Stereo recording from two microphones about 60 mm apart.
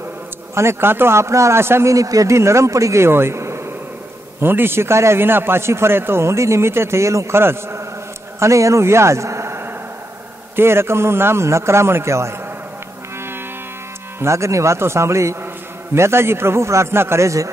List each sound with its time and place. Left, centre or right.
0.6 s a man's voice: right
1.9 s a man's voice: right
2.3 s a man's voice: right
4.4 s a man's voice: right
8.4 s a man's voice: right
14.2 s a man's voice: right